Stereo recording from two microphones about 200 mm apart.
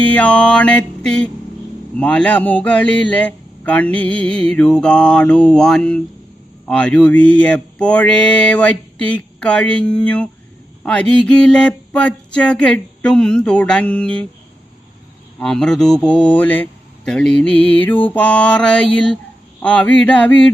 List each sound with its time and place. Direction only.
0.0 s speech: 5° left (ahead or behind)
15.4 s speech: 5° left (ahead or behind)